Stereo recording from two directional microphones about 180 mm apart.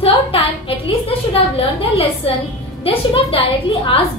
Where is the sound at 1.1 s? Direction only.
30° left (ahead or behind).